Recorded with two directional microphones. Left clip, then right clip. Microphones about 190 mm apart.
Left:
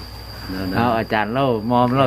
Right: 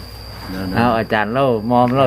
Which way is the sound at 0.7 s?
15° right (ahead or behind).